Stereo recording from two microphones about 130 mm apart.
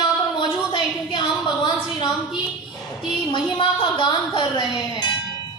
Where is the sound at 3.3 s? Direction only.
40° left (ahead or behind).